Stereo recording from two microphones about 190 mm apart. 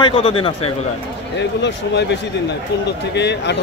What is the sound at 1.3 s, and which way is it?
A man's voice, 65° left (ahead or behind).